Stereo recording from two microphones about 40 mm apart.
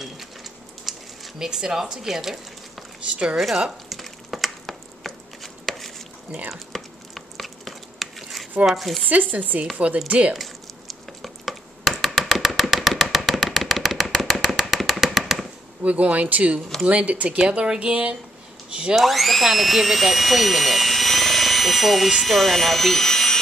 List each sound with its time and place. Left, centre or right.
0.0 s a sound: centre
3.3 s speech: centre
3.9 s a sound: centre
8.6 s speech: centre
9.1 s speech: right
10.0 s speech: right
10.3 s a sound: centre
15.8 s speech: right
17.4 s speech: right
18.9 s speech: centre